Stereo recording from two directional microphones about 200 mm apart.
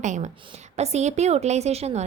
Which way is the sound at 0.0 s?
35° right (ahead or behind).